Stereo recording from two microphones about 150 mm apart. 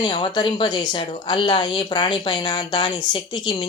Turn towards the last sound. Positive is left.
turn(degrees=35)  # may be behind; listen again after turning